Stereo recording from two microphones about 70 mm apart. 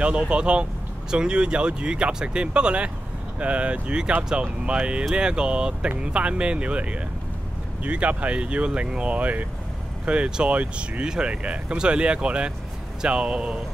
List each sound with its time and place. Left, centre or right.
0.0 s speech: centre